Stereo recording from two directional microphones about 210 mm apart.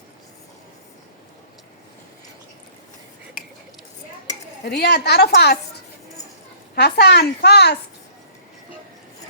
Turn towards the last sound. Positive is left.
turn(degrees=50)  # may be behind; listen again after turning